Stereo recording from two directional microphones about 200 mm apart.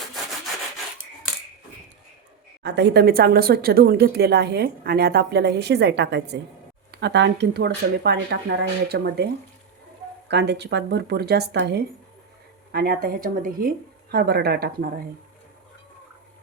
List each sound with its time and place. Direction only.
2.6 s speech: 60° right (ahead or behind)
10.2 s speech: 60° right (ahead or behind)